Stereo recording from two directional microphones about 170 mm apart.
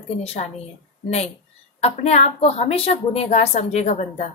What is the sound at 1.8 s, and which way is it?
A woman's voice, 40° left (ahead or behind).